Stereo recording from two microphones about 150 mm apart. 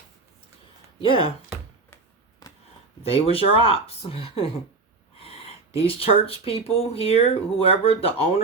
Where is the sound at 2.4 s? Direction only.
25° left (ahead or behind).